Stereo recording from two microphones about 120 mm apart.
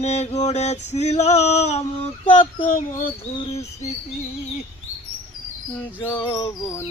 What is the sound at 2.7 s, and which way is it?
Speech, 90° left.